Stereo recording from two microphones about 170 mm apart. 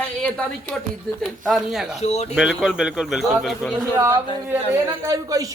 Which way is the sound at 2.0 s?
40° left (ahead or behind).